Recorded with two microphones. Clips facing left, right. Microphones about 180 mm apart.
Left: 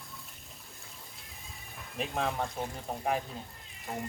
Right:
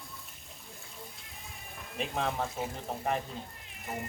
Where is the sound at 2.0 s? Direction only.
Centre (ahead or behind).